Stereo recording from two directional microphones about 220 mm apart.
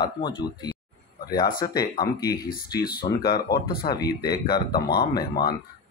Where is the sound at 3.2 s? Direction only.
45° left (ahead or behind).